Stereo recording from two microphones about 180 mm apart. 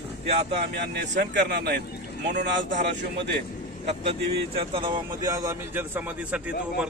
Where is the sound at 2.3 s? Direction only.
45° right (ahead or behind).